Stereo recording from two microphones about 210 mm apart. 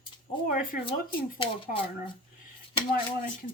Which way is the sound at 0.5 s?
40° left (ahead or behind).